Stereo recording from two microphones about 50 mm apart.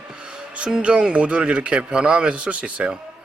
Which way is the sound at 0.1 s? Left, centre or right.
Centre.